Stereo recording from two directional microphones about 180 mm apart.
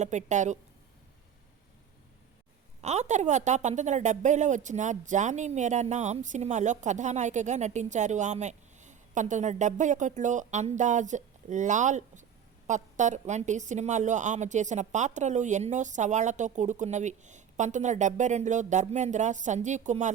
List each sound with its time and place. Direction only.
0.0 s a woman's voice: 40° right (ahead or behind)
2.8 s a woman's voice: 40° right (ahead or behind)